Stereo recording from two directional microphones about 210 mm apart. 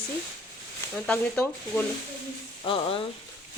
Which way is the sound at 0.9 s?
5° left (ahead or behind).